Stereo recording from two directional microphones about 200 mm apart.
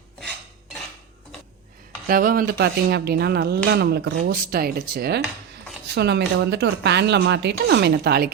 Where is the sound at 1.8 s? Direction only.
45° right (ahead or behind).